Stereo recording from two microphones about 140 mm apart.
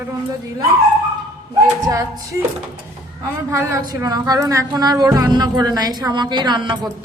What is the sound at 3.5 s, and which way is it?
Speech, 20° right (ahead or behind).